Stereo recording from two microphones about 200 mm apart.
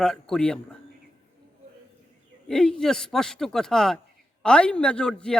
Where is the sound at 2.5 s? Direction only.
5° left (ahead or behind).